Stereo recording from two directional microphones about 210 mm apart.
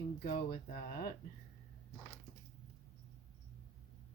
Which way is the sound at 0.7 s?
45° left (ahead or behind).